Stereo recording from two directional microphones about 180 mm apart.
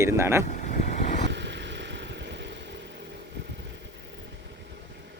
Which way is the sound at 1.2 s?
80° right.